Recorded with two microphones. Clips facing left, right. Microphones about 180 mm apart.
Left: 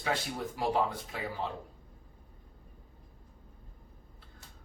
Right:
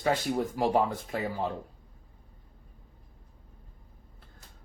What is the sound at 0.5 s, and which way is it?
Speech, 45° right (ahead or behind).